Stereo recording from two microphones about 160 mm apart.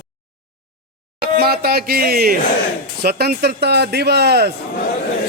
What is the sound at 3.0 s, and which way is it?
A man's voice, 80° right.